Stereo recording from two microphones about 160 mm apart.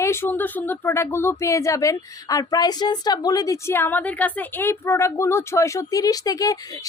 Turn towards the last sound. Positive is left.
turn(degrees=20)  # may be behind; listen again after turning